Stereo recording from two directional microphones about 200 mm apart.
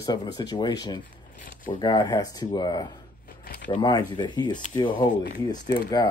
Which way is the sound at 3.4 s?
45° left (ahead or behind).